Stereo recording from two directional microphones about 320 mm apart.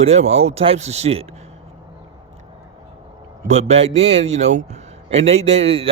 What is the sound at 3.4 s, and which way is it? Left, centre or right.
A man's voice, centre.